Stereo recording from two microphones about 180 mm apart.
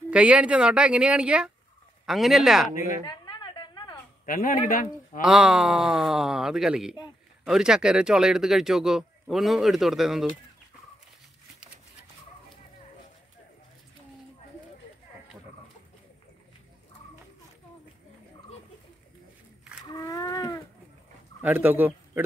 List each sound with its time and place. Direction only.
0.1 s speech: 5° right (ahead or behind)
3.1 s a sound: 25° left (ahead or behind)
4.3 s a man's voice: 50° left (ahead or behind)
5.2 s speech: 5° right (ahead or behind)
19.6 s wild animals: 5° right (ahead or behind)
19.9 s a sound: 20° left (ahead or behind)
21.4 s speech: 10° right (ahead or behind)